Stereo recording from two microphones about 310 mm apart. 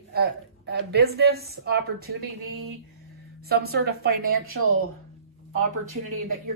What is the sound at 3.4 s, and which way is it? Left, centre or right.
A woman's voice, right.